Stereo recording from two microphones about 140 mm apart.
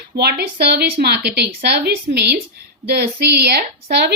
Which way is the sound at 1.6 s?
90° right.